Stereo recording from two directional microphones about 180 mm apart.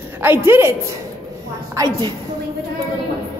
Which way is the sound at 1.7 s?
20° right (ahead or behind).